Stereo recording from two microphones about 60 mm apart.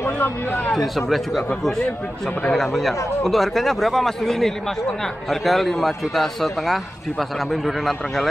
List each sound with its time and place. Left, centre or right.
0.0 s speech: left
0.7 s a man's voice: centre
2.5 s a man's voice: centre